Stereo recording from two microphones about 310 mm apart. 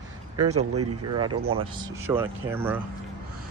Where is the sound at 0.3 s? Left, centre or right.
Right.